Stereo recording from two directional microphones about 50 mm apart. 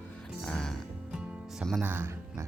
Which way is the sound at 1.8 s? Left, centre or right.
Right.